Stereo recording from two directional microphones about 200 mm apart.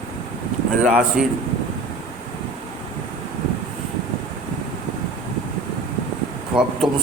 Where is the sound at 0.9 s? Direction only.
5° right (ahead or behind).